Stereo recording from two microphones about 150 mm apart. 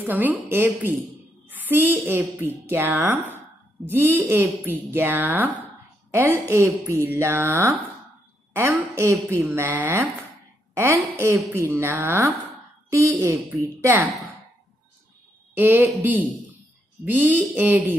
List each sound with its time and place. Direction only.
0.0 s a woman's voice: 10° right (ahead or behind)
15.5 s a woman's voice: 10° right (ahead or behind)